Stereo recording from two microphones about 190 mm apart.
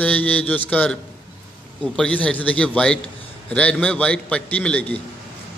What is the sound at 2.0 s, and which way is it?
A man's voice, 5° left (ahead or behind).